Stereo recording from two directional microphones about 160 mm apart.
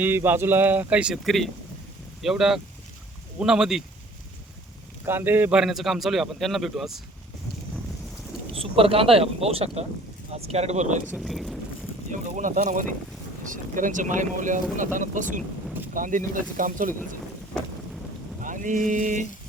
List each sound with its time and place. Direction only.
0.0 s a man's voice: 15° right (ahead or behind)
5.0 s a man's voice: 15° right (ahead or behind)
8.5 s speech: 35° right (ahead or behind)
11.1 s a sound: centre (ahead or behind)
12.4 s speech: 55° right (ahead or behind)
18.4 s speech: 55° right (ahead or behind)